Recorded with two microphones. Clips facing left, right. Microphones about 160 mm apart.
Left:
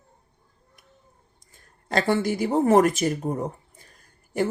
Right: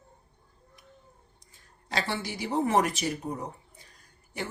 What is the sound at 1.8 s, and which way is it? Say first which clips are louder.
Speech: left 10 dB; 50° left (ahead or behind).